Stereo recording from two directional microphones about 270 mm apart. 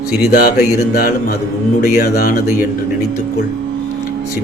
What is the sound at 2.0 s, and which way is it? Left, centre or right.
Speech, left.